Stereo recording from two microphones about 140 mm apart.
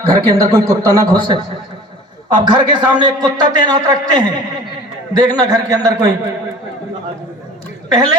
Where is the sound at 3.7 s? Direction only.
30° right (ahead or behind).